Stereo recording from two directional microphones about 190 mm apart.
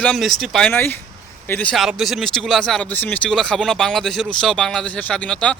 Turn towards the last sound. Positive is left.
turn(degrees=5)  # may be behind; listen again after turning